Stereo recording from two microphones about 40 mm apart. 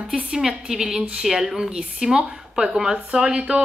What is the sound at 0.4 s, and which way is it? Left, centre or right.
Speech, centre.